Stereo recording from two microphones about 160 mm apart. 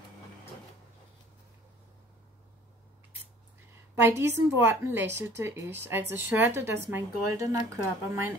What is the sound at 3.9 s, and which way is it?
A woman's voice, 15° right (ahead or behind).